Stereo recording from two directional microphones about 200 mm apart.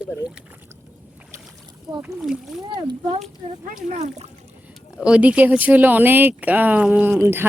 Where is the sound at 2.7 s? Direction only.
25° right (ahead or behind).